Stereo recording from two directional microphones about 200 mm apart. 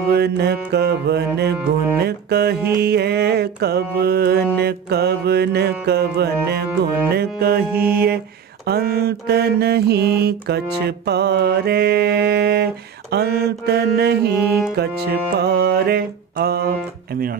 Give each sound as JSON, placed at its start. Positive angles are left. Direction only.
{"t": 0.1, "sound": "music", "side_deg": -55}
{"t": 2.0, "sound": "mantra", "side_deg": -55}